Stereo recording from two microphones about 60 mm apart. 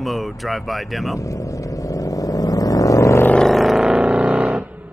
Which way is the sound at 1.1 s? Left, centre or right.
Left.